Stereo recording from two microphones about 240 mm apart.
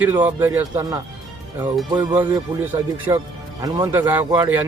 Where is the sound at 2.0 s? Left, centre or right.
Centre.